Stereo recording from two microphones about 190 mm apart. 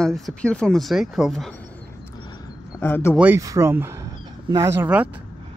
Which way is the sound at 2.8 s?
10° left (ahead or behind).